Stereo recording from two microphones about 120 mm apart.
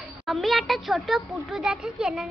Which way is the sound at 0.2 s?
Centre (ahead or behind).